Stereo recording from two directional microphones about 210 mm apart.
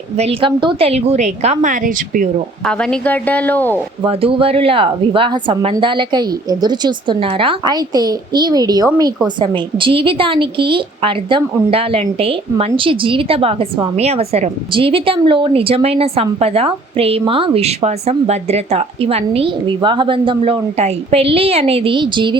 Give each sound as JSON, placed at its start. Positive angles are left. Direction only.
{"t": 0.2, "sound": "a woman's voice", "side_deg": -25}
{"t": 2.6, "sound": "speech", "side_deg": 5}
{"t": 4.0, "sound": "a woman's voice", "side_deg": -25}